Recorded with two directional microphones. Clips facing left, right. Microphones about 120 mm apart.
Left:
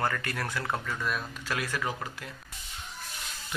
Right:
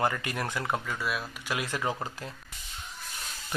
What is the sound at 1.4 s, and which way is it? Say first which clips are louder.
Speech: right 2 dB; 20° right (ahead or behind).